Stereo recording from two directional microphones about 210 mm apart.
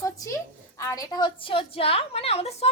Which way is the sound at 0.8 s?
15° left (ahead or behind).